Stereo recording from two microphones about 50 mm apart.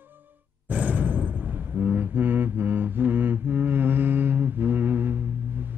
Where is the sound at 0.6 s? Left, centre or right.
Right.